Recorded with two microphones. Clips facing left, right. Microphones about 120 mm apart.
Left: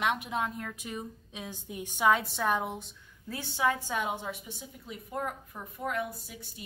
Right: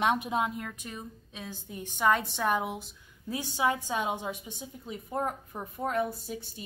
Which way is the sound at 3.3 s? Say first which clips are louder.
Right 1 dB; 15° right (ahead or behind).